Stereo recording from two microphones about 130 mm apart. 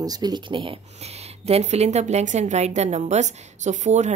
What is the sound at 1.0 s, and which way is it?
A woman's voice, 55° right (ahead or behind).